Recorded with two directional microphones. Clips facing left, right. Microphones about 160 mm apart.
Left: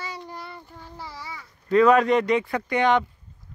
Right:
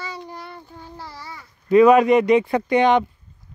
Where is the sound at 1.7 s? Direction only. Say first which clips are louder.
Right 5 dB; 15° right (ahead or behind).